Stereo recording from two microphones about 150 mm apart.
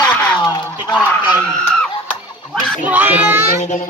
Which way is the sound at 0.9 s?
10° left (ahead or behind).